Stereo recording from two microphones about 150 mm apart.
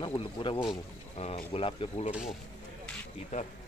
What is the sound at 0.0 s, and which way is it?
Speech, 35° left (ahead or behind).